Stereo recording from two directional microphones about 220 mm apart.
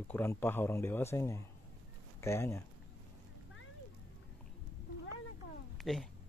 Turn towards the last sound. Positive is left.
turn(degrees=0)  # may be behind; listen again after turning